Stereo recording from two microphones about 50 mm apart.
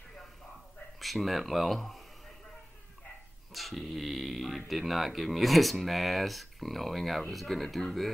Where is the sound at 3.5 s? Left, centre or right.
Centre.